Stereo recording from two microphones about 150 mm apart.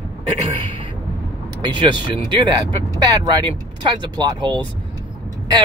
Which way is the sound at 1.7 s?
30° right (ahead or behind).